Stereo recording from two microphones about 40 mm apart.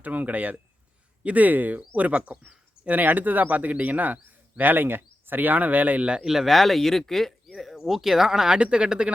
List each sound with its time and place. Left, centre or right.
0.0 s speech: right
2.8 s a man's voice: right
6.2 s speech: centre
6.5 s speech: centre
8.5 s speech: right